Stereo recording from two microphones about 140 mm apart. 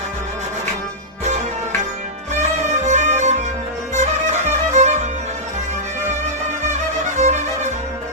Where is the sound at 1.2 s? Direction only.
55° right (ahead or behind).